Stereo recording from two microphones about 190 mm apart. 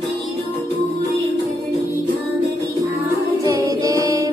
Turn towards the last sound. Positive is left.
turn(degrees=-15)  # may be behind; listen again after turning